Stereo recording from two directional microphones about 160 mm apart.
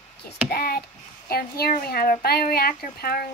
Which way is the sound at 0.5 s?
70° left (ahead or behind).